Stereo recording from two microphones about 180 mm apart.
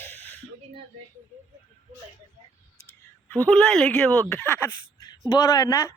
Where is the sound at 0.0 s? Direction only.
10° left (ahead or behind).